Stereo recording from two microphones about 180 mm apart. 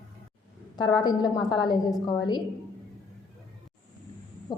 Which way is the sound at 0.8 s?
25° left (ahead or behind).